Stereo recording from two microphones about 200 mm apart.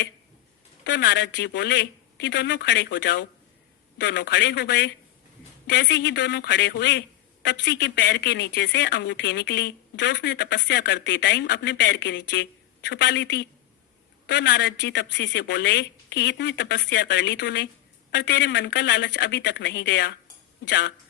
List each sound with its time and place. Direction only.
0.9 s speech: 60° left (ahead or behind)